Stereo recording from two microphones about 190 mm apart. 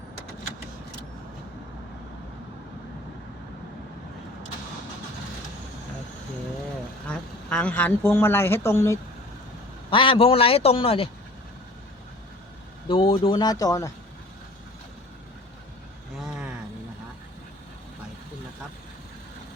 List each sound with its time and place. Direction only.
7.1 s a woman's voice: 5° left (ahead or behind)
9.9 s speech: 25° left (ahead or behind)
12.9 s speech: 30° left (ahead or behind)
16.2 s a sound: 5° right (ahead or behind)